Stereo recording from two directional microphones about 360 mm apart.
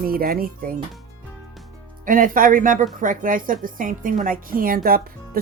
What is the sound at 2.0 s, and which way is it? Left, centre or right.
A woman's voice, right.